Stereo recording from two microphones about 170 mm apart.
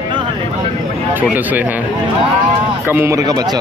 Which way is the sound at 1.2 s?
10° right (ahead or behind).